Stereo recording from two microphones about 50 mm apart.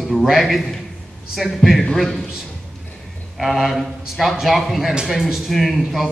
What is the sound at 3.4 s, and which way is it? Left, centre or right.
A man's voice, centre.